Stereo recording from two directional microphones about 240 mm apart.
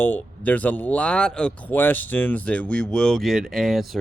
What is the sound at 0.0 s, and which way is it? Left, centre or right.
Speech, centre.